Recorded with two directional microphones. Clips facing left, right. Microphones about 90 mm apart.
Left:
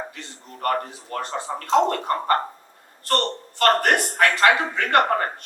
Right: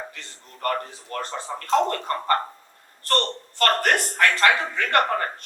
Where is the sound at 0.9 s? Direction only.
20° left (ahead or behind).